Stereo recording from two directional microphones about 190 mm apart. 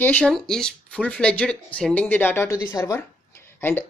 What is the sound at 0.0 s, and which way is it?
Speech, 5° left (ahead or behind).